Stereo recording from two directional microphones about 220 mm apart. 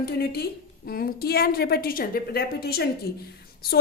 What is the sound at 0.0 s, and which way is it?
A woman's voice, 45° left (ahead or behind).